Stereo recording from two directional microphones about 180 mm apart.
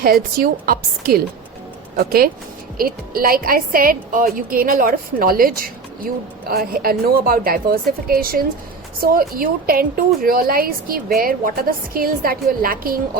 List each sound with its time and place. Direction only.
0.0 s a woman's voice: 55° right (ahead or behind)